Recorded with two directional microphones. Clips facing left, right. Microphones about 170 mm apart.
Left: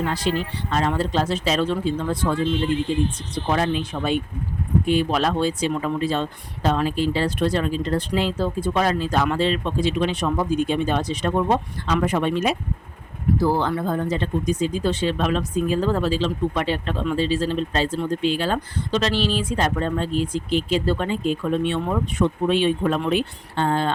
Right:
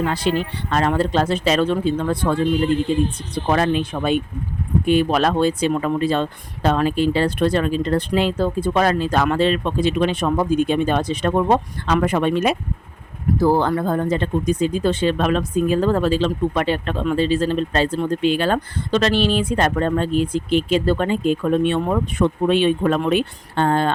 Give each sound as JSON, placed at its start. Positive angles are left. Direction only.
{"t": 0.1, "sound": "speech", "side_deg": -60}
{"t": 13.4, "sound": "speech", "side_deg": -50}